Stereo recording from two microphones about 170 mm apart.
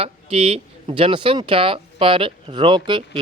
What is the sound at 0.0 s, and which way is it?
Speech, 35° right (ahead or behind).